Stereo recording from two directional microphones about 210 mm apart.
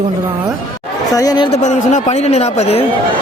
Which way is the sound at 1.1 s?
15° left (ahead or behind).